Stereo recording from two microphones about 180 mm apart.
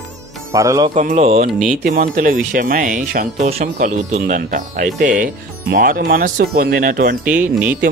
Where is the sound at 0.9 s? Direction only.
45° right (ahead or behind).